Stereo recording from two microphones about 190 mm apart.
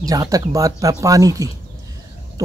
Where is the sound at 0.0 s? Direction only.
20° right (ahead or behind).